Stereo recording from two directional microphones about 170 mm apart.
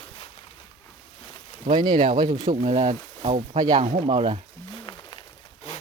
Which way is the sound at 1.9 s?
45° right (ahead or behind).